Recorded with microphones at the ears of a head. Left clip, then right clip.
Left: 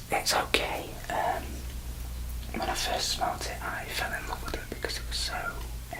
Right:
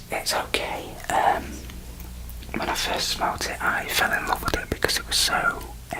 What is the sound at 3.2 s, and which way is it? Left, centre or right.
Whispering, right.